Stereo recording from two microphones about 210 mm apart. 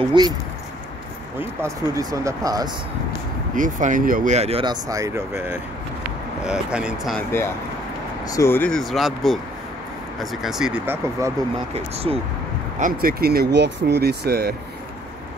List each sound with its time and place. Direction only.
0.2 s speech: 20° right (ahead or behind)
1.6 s speech: 15° right (ahead or behind)
3.5 s speech: 40° right (ahead or behind); by 7.2 s centre (ahead or behind)
7.2 s speech: 10° left (ahead or behind); by 11.3 s 10° right (ahead or behind)
11.7 s speech: 30° right (ahead or behind)
12.7 s speech: 40° right (ahead or behind)